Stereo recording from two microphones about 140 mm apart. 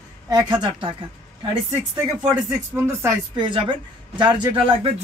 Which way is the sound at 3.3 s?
35° right (ahead or behind).